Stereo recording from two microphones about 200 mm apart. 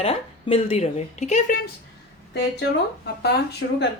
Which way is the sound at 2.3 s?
55° left (ahead or behind).